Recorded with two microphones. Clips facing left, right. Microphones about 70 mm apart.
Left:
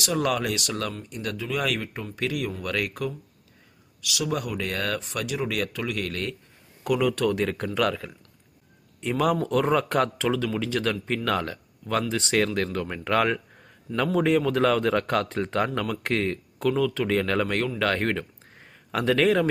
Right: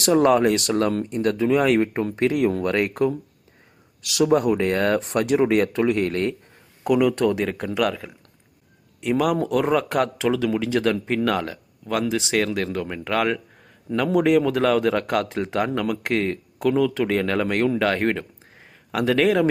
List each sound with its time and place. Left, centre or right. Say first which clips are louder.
0.1 s speech: right 9 dB; right
4.0 s speech: right 9 dB; right
4.3 s speech: right 10 dB; right
4.9 s speech: right 10 dB; right
6.8 s speech: right 4 dB; centre
7.4 s speech: right 2 dB; centre
11.3 s speech: right 3 dB; centre